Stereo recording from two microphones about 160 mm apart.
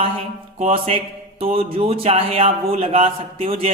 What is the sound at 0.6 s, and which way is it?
Speech, 40° right (ahead or behind).